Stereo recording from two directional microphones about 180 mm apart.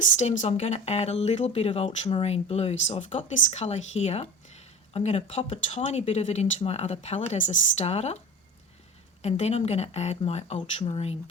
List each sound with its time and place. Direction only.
0.0 s speech: 45° left (ahead or behind)
9.2 s speech: 35° left (ahead or behind)